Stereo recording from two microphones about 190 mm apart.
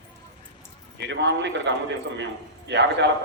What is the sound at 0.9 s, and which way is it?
A man's voice, 65° right (ahead or behind).